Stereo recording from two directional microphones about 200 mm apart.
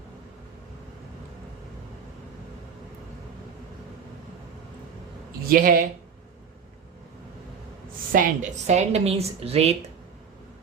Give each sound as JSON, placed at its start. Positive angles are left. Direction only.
{"t": 5.5, "sound": "speech", "side_deg": -45}
{"t": 8.1, "sound": "a woman's voice", "side_deg": -40}